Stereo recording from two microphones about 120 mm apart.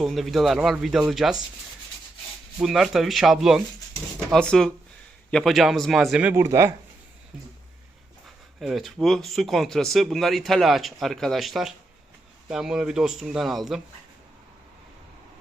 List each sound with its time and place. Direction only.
0.0 s speech: centre (ahead or behind)
2.6 s speech: 5° right (ahead or behind)
6.2 s speech: 20° right (ahead or behind)
8.6 s speech: centre (ahead or behind)